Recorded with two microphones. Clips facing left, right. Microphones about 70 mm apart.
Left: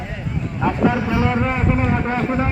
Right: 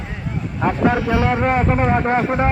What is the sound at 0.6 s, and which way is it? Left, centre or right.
A man's voice, right.